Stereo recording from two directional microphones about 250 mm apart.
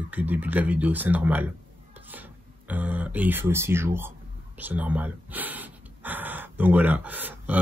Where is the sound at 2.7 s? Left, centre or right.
Centre.